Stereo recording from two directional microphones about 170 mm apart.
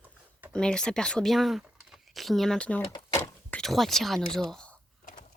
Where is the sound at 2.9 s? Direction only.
25° left (ahead or behind).